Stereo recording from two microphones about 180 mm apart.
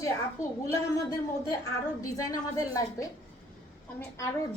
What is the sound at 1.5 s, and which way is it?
A woman's voice, 20° left (ahead or behind).